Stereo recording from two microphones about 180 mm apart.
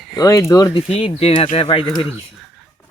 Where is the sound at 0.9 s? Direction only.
30° left (ahead or behind).